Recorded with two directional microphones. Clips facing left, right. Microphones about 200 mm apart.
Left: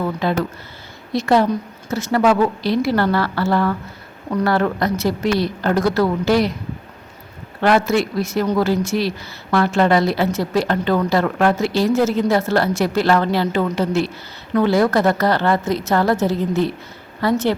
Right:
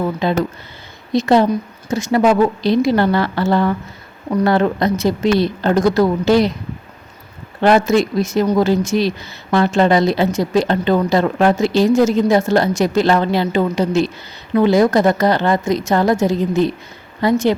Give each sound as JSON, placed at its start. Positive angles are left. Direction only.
{"t": 0.0, "sound": "speech", "side_deg": -20}
{"t": 7.6, "sound": "a woman's voice", "side_deg": -20}